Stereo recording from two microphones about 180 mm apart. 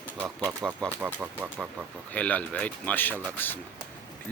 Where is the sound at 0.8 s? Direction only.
5° left (ahead or behind).